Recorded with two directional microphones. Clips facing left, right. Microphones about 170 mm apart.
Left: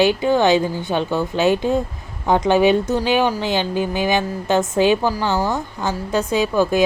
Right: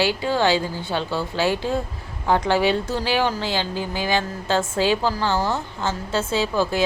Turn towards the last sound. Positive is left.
turn(degrees=15)  # may be behind; listen again after turning